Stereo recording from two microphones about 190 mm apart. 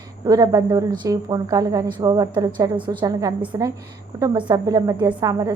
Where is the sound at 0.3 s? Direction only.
20° right (ahead or behind).